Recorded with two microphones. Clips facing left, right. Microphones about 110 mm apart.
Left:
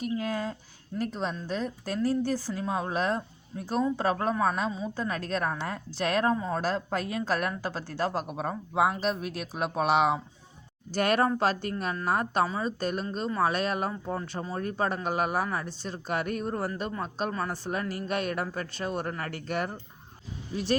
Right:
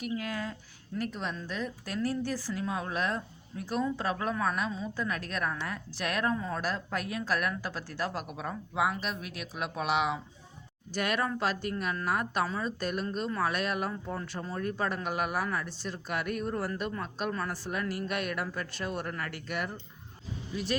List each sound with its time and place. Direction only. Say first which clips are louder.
0.2 s speech: left 4 dB; 30° left (ahead or behind)